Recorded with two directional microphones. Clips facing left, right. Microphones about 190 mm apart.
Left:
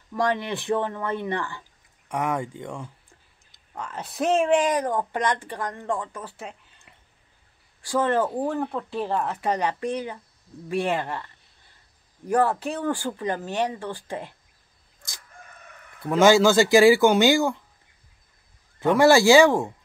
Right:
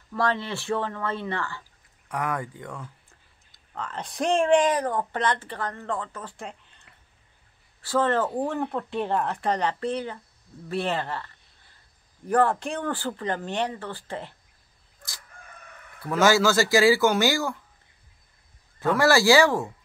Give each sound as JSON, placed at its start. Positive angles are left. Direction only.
{"t": 0.1, "sound": "speech", "side_deg": 15}
{"t": 3.7, "sound": "speech", "side_deg": 10}
{"t": 8.5, "sound": "speech", "side_deg": 0}
{"t": 12.3, "sound": "speech", "side_deg": 10}
{"t": 16.0, "sound": "speech", "side_deg": 20}
{"t": 18.8, "sound": "speech", "side_deg": 20}